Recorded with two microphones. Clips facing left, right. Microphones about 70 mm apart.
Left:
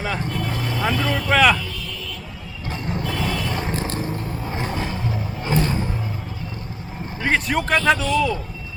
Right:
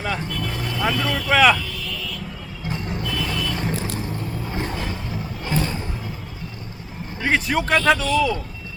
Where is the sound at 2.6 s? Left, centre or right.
Centre.